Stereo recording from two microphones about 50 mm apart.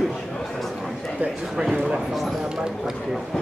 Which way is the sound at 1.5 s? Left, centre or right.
Centre.